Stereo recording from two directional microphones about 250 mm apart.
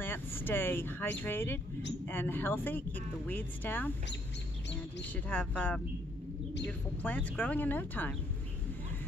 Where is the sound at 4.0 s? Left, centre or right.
Left.